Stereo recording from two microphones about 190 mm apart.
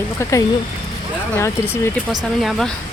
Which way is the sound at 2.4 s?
Centre (ahead or behind).